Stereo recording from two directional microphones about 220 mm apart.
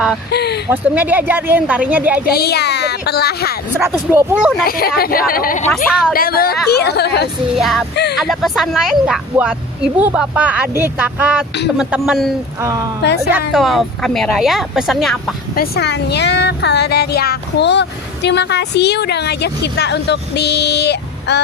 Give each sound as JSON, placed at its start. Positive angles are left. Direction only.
{"t": 0.3, "sound": "speech", "side_deg": 45}
{"t": 0.7, "sound": "speech", "side_deg": -10}
{"t": 2.3, "sound": "speech", "side_deg": 45}
{"t": 3.7, "sound": "speech", "side_deg": -10}
{"t": 4.6, "sound": "speech", "side_deg": 45}
{"t": 5.6, "sound": "speech", "side_deg": 5}
{"t": 6.1, "sound": "speech", "side_deg": 45}
{"t": 7.5, "sound": "speech", "side_deg": 0}
{"t": 12.6, "sound": "speech", "side_deg": -15}
{"t": 13.5, "sound": "speech", "side_deg": 0}
{"t": 15.5, "sound": "speech", "side_deg": 45}